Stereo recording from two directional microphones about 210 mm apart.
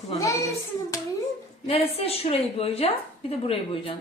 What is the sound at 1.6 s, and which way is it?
A woman's voice, 25° left (ahead or behind).